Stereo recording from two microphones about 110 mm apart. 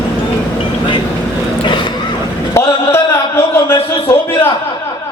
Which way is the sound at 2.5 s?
25° left (ahead or behind).